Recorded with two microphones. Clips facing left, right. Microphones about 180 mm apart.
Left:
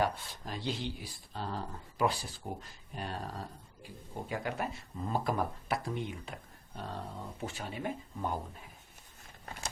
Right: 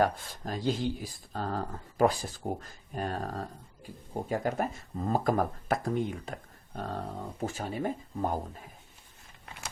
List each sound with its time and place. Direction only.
0.0 s speech: 45° right (ahead or behind)